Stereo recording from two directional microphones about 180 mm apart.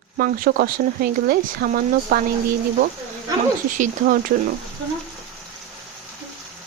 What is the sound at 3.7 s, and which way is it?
Speech, 45° right (ahead or behind).